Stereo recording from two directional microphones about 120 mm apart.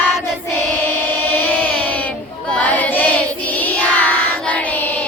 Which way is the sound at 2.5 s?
15° left (ahead or behind).